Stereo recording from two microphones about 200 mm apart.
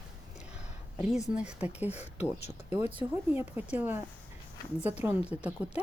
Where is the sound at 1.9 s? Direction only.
30° left (ahead or behind).